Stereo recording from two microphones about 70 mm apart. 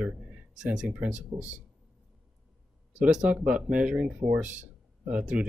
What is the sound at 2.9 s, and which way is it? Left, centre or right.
A man's voice, centre.